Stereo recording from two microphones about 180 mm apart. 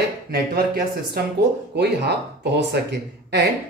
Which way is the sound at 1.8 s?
65° right (ahead or behind).